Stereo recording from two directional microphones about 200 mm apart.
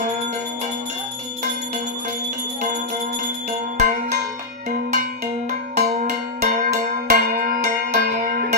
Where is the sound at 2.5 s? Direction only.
40° right (ahead or behind).